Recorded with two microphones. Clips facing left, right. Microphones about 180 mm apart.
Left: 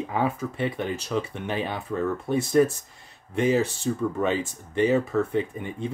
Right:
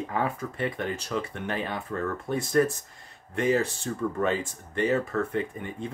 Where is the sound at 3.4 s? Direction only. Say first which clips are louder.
Left 2 dB; 25° left (ahead or behind); by 5.2 s 10° left (ahead or behind).